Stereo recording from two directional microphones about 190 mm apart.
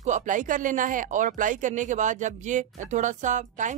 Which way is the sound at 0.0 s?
40° right (ahead or behind).